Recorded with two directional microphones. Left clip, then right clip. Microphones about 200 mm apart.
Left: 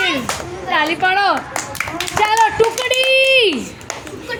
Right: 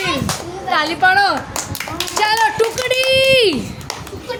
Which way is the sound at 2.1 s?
15° right (ahead or behind).